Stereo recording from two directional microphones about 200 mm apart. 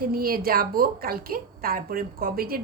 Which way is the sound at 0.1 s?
50° right (ahead or behind).